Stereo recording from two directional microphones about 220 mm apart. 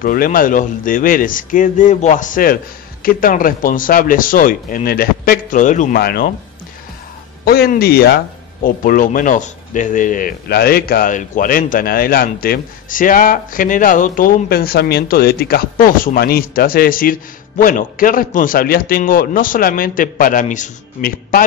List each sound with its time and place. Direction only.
0.0 s speech: 40° left (ahead or behind)
7.4 s speech: 45° left (ahead or behind)